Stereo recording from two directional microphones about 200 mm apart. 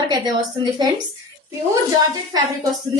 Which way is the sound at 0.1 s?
20° right (ahead or behind).